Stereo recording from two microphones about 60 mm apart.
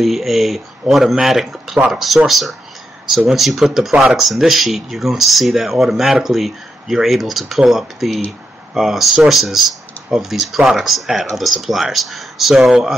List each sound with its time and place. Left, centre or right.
0.0 s speech: centre
3.9 s speech: centre
4.2 s speech: centre